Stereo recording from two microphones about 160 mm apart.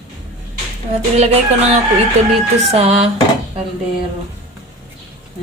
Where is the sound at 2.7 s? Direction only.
40° right (ahead or behind).